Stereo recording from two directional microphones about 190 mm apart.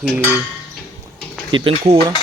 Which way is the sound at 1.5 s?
30° right (ahead or behind).